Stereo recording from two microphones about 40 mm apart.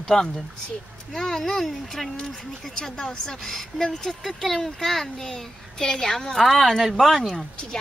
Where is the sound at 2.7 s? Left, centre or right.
Centre.